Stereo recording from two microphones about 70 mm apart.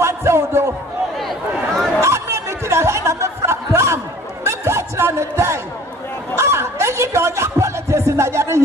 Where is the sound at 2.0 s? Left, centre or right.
Right.